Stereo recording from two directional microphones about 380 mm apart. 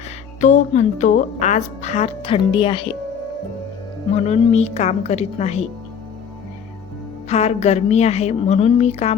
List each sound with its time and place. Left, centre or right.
0.4 s speech: centre
4.1 s speech: centre
7.3 s speech: centre